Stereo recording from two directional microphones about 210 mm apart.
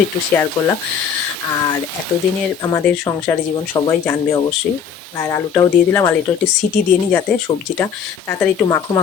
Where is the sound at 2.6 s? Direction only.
15° left (ahead or behind).